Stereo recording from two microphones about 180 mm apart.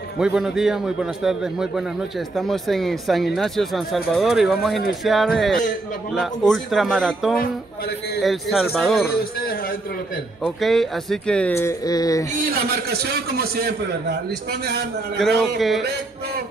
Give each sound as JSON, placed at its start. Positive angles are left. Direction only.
{"t": 0.2, "sound": "a man's voice", "side_deg": -5}
{"t": 9.1, "sound": "a sound", "side_deg": 55}
{"t": 10.4, "sound": "speech", "side_deg": 0}
{"t": 12.6, "sound": "a man's voice", "side_deg": -60}
{"t": 15.1, "sound": "a man's voice", "side_deg": 0}